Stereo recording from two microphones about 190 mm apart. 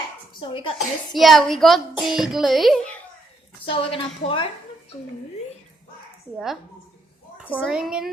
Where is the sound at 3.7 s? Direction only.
25° left (ahead or behind).